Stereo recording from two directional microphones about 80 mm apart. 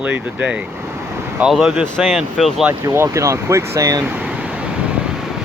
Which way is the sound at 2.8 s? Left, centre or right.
Right.